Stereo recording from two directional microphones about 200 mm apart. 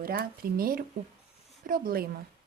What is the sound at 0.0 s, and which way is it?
Speech, 45° right (ahead or behind).